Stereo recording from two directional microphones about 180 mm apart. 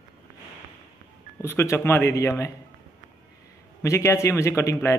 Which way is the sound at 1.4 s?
15° left (ahead or behind).